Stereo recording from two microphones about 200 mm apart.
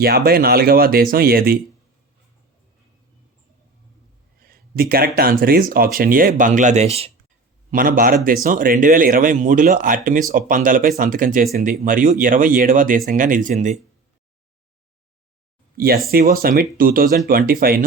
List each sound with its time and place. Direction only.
0.0 s speech: 50° right (ahead or behind)
4.4 s speech: 50° right (ahead or behind); by 7.1 s 30° right (ahead or behind)
7.7 s speech: 45° right (ahead or behind)
15.8 s speech: 50° right (ahead or behind)